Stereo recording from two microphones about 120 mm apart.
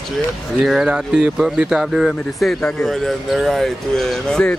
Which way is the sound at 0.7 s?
5° right (ahead or behind).